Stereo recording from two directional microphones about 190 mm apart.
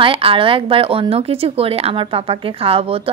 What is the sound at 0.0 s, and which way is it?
A woman's voice, 30° right (ahead or behind).